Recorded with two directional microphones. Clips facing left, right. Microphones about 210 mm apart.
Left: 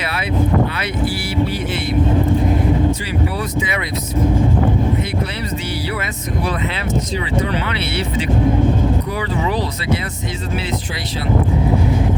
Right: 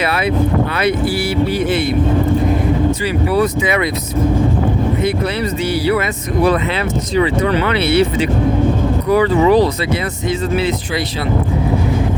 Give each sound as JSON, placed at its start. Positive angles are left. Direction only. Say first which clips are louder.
{"t": 3.3, "sound": "speech", "louder": "right 7 dB", "side_deg": -70}
{"t": 7.2, "sound": "speech", "louder": "right 6 dB", "side_deg": -55}